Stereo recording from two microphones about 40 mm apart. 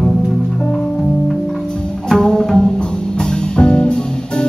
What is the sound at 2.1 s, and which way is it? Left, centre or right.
Music, centre.